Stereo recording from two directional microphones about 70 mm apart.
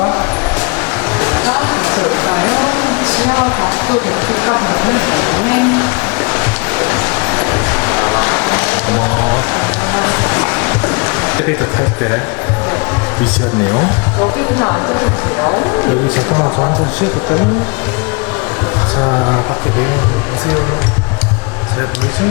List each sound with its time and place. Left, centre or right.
1.2 s music: centre
6.7 s a sound: left
9.9 s music: centre
11.3 s speech: left
13.7 s speech: left
16.3 s speech: left
19.0 s speech: left